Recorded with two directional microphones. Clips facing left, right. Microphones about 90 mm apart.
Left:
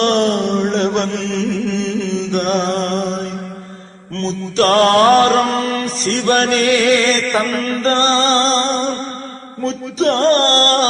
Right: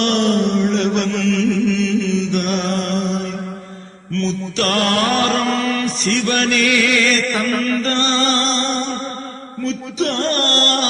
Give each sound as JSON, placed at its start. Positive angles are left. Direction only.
{"t": 0.0, "sound": "music", "side_deg": 35}
{"t": 4.1, "sound": "mantra", "side_deg": 40}